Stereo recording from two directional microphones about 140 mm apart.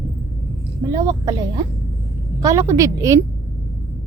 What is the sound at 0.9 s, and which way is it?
A woman's voice, 25° right (ahead or behind).